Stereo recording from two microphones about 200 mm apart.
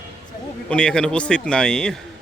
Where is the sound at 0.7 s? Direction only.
5° left (ahead or behind).